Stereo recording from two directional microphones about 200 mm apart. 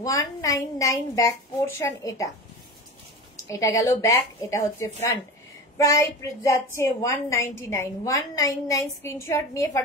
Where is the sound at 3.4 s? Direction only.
15° left (ahead or behind).